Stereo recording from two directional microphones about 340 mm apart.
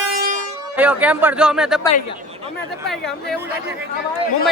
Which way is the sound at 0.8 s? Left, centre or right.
Centre.